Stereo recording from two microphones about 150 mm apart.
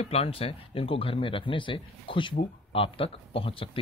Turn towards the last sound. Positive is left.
turn(degrees=35)  # may be behind; listen again after turning